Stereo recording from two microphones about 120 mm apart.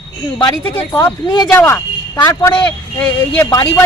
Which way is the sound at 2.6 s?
15° left (ahead or behind).